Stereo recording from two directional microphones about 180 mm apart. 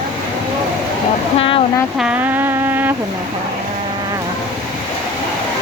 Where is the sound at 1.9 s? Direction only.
5° right (ahead or behind).